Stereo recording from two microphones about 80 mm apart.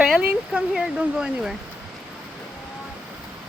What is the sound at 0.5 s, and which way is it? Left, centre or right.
Speech, centre.